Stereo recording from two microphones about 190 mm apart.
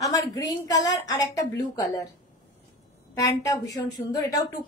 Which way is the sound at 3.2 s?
20° left (ahead or behind).